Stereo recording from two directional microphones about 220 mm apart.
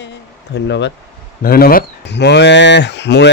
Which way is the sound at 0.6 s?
50° left (ahead or behind).